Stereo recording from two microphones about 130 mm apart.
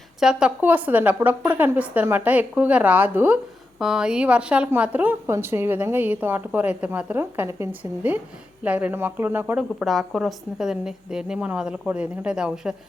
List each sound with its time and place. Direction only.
0.2 s a woman's voice: 5° right (ahead or behind)
9.7 s a woman's voice: centre (ahead or behind)